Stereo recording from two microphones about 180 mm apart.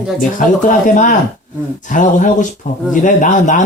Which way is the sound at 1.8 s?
45° left (ahead or behind).